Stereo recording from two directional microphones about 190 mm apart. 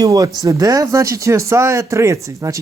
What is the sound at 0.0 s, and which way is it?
Speech, 20° right (ahead or behind).